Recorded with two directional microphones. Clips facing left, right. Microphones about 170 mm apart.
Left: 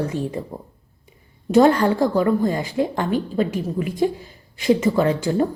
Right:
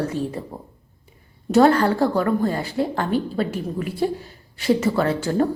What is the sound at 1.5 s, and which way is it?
Speech, 15° left (ahead or behind).